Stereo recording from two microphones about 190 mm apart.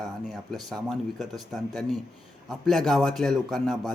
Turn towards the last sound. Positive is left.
turn(degrees=0)  # may be behind; listen again after turning